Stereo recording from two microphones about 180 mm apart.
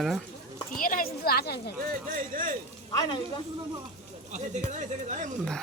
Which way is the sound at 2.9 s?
25° left (ahead or behind).